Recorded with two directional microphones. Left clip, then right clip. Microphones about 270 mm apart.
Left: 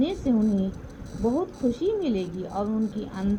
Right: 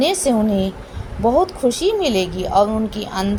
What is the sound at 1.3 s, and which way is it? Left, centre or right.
Speech, left.